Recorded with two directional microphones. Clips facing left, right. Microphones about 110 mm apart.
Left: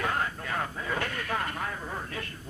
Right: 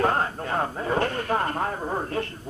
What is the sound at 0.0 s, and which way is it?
A man's voice, 40° right (ahead or behind).